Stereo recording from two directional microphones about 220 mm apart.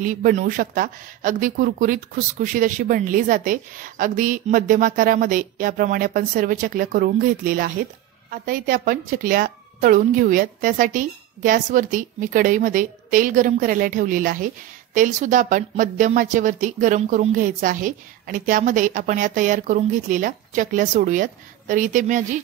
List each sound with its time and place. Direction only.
0.0 s speech: 40° right (ahead or behind)